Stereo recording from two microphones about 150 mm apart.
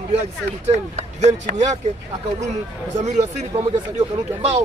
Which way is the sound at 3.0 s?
50° right (ahead or behind).